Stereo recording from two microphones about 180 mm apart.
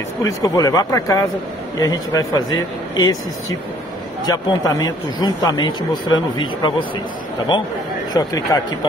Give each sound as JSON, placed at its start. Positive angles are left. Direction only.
{"t": 0.2, "sound": "speech", "side_deg": 20}
{"t": 4.3, "sound": "speech", "side_deg": 20}
{"t": 8.1, "sound": "speech", "side_deg": 20}